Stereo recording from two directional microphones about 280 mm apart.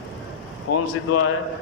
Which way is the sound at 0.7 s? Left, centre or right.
Left.